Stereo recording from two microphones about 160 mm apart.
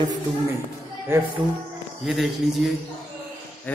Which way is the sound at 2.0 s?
Centre (ahead or behind).